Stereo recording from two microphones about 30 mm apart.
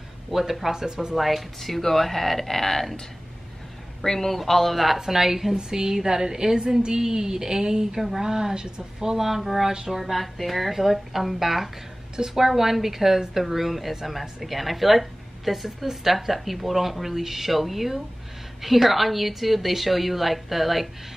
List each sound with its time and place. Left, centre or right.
0.3 s a woman's voice: centre
1.1 s speech: centre
4.0 s speech: centre
5.0 s a woman's voice: centre
9.3 s a woman's voice: centre
9.7 s a woman's voice: centre
9.9 s a woman's voice: centre